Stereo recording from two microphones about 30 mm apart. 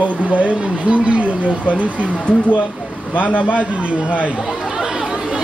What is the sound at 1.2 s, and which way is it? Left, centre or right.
Speech, left.